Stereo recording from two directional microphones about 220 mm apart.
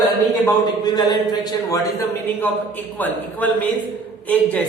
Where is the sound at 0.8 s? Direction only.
20° left (ahead or behind).